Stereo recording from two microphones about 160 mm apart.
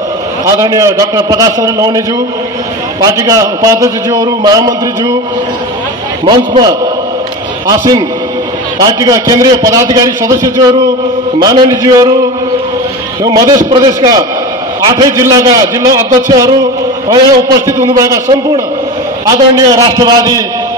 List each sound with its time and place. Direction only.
0.5 s a man's voice: 20° right (ahead or behind)
6.2 s a man's voice: 25° right (ahead or behind)
13.7 s a man's voice: 25° right (ahead or behind)
19.5 s a man's voice: 25° right (ahead or behind)